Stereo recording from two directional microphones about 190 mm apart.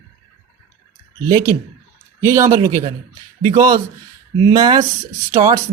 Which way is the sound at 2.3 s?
15° right (ahead or behind).